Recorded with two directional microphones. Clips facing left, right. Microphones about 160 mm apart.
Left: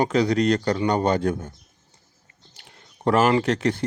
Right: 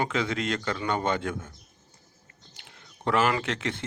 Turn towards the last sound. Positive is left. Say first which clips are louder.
# left 9 dB
turn(degrees=40)  # may be behind; listen again after turning